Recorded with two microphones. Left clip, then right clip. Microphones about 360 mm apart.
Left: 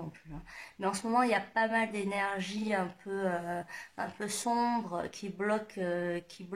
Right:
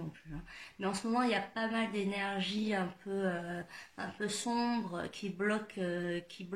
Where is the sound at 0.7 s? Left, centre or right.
Centre.